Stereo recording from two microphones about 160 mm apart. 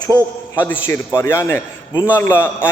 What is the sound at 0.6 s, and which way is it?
A man's voice, 15° left (ahead or behind).